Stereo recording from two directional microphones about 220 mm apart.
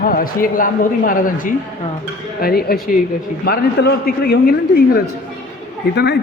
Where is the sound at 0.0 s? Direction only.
40° left (ahead or behind).